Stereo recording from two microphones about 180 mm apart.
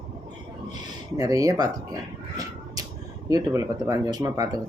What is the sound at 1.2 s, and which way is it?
Speech, 20° right (ahead or behind).